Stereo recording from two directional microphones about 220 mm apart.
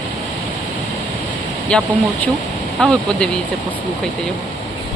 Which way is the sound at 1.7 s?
5° left (ahead or behind).